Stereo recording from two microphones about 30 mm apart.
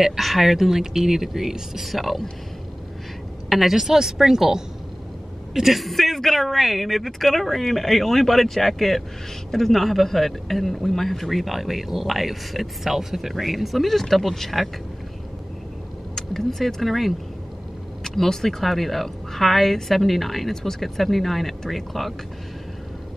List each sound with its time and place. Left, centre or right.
0.0 s speech: centre
1.9 s speech: centre
3.4 s a woman's voice: centre
3.7 s speech: centre
5.5 s speech: centre
16.2 s a woman's voice: centre